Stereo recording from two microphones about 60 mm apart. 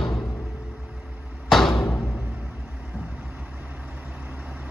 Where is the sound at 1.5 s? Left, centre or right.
Centre.